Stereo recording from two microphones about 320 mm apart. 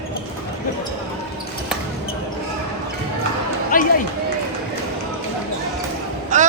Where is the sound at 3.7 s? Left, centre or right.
Left.